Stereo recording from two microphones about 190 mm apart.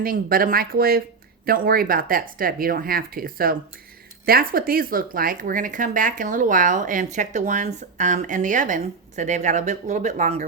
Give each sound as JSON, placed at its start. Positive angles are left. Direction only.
{"t": 0.0, "sound": "speech", "side_deg": -50}